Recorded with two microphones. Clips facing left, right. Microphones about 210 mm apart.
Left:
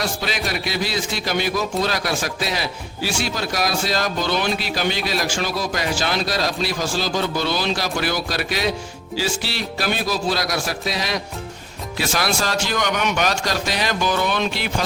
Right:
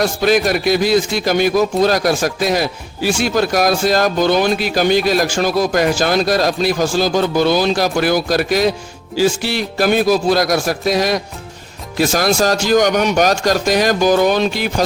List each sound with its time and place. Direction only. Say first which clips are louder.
0.0 s a man's voice: right 11 dB; 50° right (ahead or behind)